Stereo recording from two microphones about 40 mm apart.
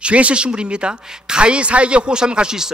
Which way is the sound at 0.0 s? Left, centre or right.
Right.